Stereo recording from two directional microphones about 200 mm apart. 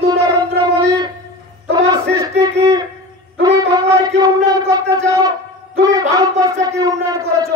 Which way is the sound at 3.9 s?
20° right (ahead or behind).